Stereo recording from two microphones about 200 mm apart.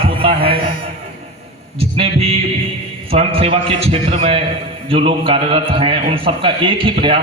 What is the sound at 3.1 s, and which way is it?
A man's voice, 30° right (ahead or behind).